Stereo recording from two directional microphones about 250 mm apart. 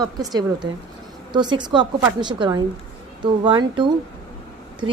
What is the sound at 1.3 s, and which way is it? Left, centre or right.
A woman's voice, centre.